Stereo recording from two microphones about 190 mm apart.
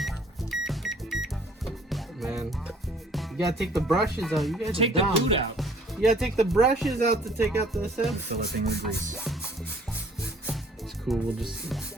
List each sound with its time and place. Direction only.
0.0 s music: centre (ahead or behind)
4.2 s speech: centre (ahead or behind)
4.7 s speech: 30° right (ahead or behind)
5.5 s speech: centre (ahead or behind)
8.3 s rub: 55° right (ahead or behind)
9.2 s music: centre (ahead or behind)
11.1 s speech: centre (ahead or behind)